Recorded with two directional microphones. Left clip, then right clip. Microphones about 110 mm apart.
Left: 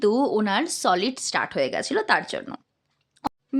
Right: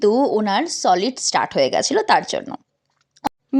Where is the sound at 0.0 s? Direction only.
20° right (ahead or behind).